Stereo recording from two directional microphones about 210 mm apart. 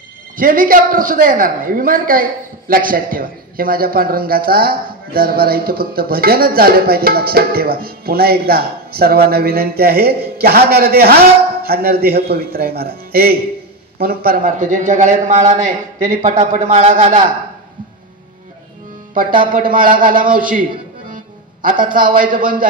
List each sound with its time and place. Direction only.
0.4 s a woman's voice: 40° right (ahead or behind)
19.1 s a woman's voice: 40° right (ahead or behind)
21.6 s a woman's voice: 40° right (ahead or behind)